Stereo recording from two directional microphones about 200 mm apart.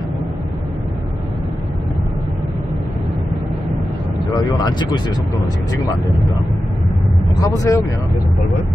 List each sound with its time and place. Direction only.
4.3 s speech: 20° left (ahead or behind)
7.3 s speech: 15° left (ahead or behind)